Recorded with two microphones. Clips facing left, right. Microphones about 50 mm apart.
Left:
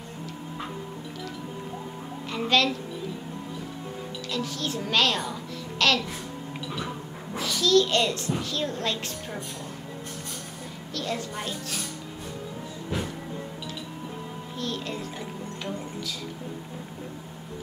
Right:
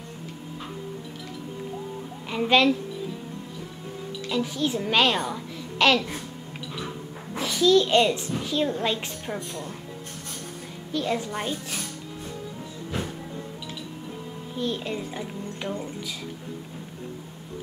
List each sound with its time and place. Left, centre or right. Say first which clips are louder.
2.3 s a woman's voice: right 4 dB; centre
4.3 s a child's voice: right 5 dB; centre
7.3 s a child's voice: right 2 dB; centre
10.9 s a woman's voice: right 5 dB; centre
14.6 s music: right 4 dB; centre